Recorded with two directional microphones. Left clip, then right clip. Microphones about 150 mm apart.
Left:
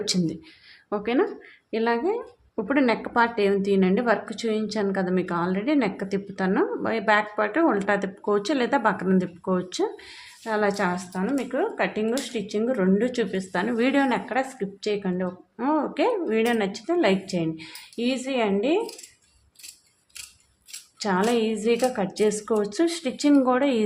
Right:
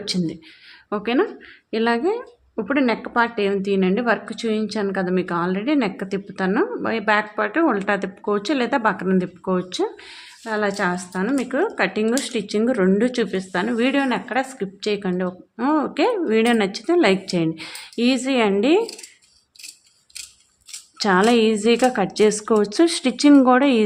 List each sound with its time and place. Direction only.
0.0 s speech: centre (ahead or behind)
0.9 s a woman's voice: 20° right (ahead or behind)
2.6 s a woman's voice: 15° right (ahead or behind)
11.1 s speech: 40° right (ahead or behind)
21.0 s a woman's voice: 45° right (ahead or behind)